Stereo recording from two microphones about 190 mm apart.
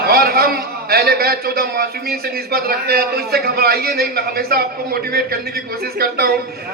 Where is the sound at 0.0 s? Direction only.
55° right (ahead or behind).